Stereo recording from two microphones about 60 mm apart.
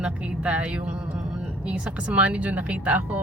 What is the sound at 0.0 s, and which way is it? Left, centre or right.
Speech, centre.